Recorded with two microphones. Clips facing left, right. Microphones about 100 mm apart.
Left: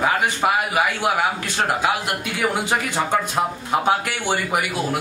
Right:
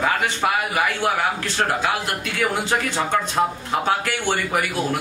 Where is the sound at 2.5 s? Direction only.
15° left (ahead or behind).